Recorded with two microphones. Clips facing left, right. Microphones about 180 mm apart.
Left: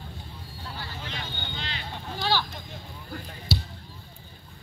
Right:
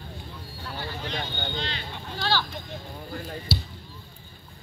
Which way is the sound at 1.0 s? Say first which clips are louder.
Right 5 dB; 35° right (ahead or behind).